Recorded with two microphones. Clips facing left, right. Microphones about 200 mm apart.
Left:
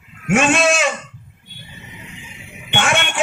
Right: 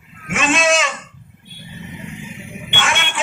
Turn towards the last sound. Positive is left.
turn(degrees=50)  # may be behind; listen again after turning